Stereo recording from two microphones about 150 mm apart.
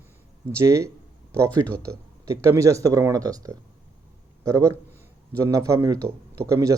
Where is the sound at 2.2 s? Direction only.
20° right (ahead or behind).